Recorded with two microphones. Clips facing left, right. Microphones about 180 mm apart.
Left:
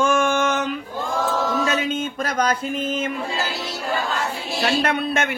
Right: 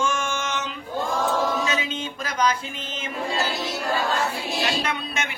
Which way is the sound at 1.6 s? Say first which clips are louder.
Left 5 dB; 55° left (ahead or behind).